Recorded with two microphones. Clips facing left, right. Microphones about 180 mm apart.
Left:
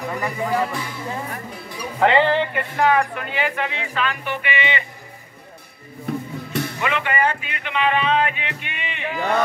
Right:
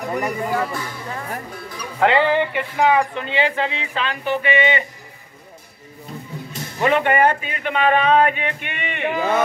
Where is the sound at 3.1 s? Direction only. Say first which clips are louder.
Right 4 dB; 25° right (ahead or behind).